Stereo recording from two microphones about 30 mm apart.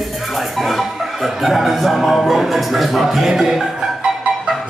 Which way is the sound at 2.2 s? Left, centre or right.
Centre.